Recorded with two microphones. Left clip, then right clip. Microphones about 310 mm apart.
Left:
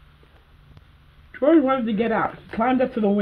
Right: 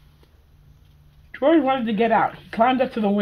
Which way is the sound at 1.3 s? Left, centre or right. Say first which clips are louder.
Even; centre.